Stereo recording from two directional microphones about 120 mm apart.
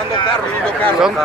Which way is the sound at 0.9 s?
5° right (ahead or behind).